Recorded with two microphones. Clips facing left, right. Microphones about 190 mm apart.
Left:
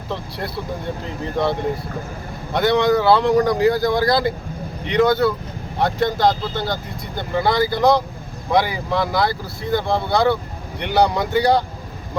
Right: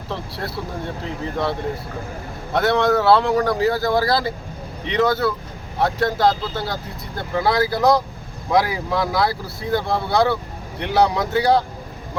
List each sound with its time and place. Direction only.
0.1 s speech: centre (ahead or behind)
2.5 s speech: 5° right (ahead or behind)